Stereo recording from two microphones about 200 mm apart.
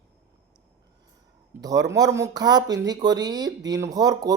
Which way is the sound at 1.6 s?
20° right (ahead or behind).